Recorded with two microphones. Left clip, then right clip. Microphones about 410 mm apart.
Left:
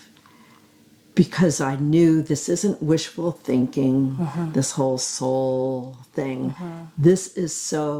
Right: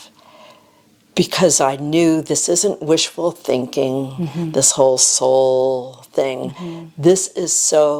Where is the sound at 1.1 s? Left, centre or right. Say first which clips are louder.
Right 7 dB; right.